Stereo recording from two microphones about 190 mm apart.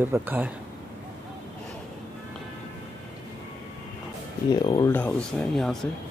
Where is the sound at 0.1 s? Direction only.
10° right (ahead or behind).